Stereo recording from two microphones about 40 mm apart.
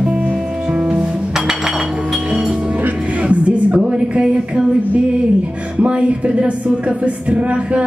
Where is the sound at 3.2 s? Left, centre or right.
Right.